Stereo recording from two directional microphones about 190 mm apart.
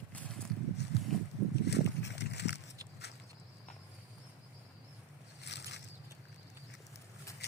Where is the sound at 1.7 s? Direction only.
65° left (ahead or behind).